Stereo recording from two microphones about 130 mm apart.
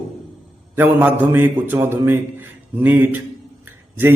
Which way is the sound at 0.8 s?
15° right (ahead or behind).